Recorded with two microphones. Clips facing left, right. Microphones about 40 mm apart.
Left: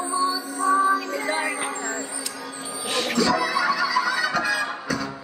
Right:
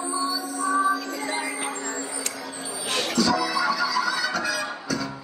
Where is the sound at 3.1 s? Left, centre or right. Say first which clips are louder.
Left 1 dB; left.